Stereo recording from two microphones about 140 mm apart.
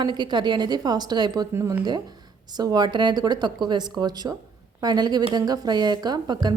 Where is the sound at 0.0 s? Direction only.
30° right (ahead or behind).